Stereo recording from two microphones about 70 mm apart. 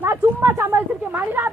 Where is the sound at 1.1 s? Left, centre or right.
Right.